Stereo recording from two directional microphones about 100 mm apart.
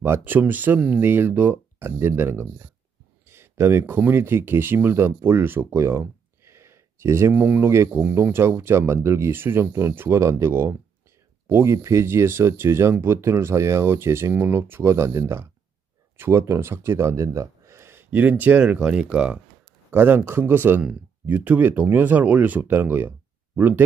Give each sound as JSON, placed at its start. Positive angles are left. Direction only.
{"t": 0.0, "sound": "speech", "side_deg": -20}
{"t": 19.9, "sound": "speech", "side_deg": -20}